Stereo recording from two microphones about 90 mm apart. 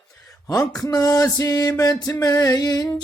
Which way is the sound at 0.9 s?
40° left (ahead or behind).